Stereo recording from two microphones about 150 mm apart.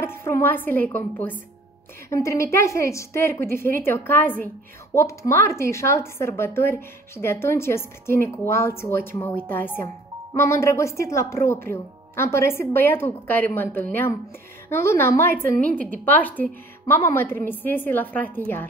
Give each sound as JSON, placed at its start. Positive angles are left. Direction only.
{"t": 0.0, "sound": "a woman's voice", "side_deg": 15}